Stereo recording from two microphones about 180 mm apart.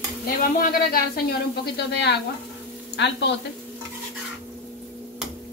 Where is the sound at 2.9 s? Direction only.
75° left (ahead or behind).